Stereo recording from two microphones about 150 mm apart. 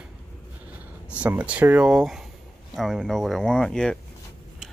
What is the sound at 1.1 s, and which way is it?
Speech, 10° right (ahead or behind).